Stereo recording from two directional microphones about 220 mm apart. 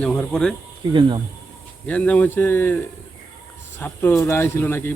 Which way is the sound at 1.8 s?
5° left (ahead or behind).